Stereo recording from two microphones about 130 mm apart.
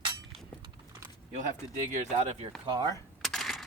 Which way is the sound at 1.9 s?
65° right (ahead or behind).